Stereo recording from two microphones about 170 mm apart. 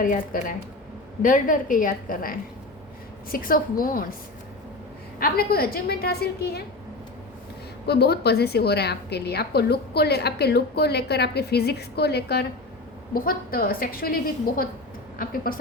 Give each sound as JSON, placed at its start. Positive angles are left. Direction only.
{"t": 0.0, "sound": "a woman's voice", "side_deg": 55}
{"t": 5.2, "sound": "a woman's voice", "side_deg": 60}
{"t": 7.9, "sound": "a woman's voice", "side_deg": 70}
{"t": 13.1, "sound": "a woman's voice", "side_deg": 60}